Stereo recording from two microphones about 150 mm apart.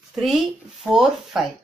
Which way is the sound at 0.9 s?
5° right (ahead or behind).